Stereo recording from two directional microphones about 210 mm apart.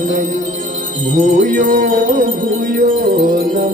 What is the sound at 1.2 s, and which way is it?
Music, 35° right (ahead or behind).